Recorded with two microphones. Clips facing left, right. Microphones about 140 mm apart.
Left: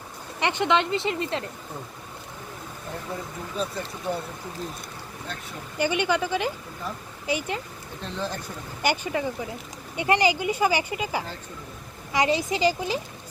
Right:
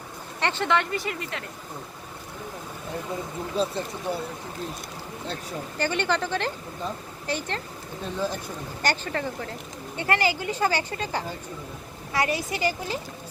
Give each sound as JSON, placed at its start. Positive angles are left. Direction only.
{"t": 0.3, "sound": "speech", "side_deg": 15}
{"t": 3.5, "sound": "speech", "side_deg": -30}
{"t": 4.1, "sound": "speech", "side_deg": -15}
{"t": 5.7, "sound": "speech", "side_deg": 10}
{"t": 8.0, "sound": "speech", "side_deg": -10}
{"t": 8.8, "sound": "speech", "side_deg": 10}